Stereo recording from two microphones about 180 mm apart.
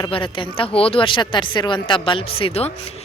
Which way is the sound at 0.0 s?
30° left (ahead or behind).